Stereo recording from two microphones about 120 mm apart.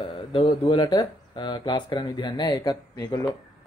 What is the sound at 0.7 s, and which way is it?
Speech, 40° left (ahead or behind).